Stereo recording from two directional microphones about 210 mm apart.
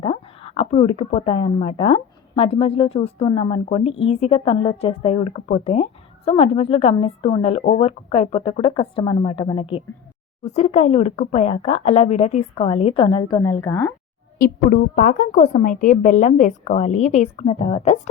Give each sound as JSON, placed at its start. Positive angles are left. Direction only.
{"t": 0.0, "sound": "speech", "side_deg": 25}
{"t": 14.3, "sound": "a woman's voice", "side_deg": 45}